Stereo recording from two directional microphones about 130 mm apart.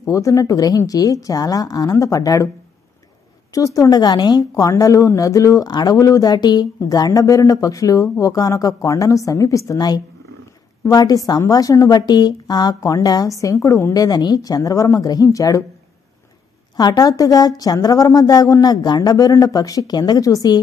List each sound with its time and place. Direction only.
0.0 s a woman's voice: 25° left (ahead or behind)
3.5 s a woman's voice: 25° left (ahead or behind)
16.7 s a woman's voice: 30° left (ahead or behind)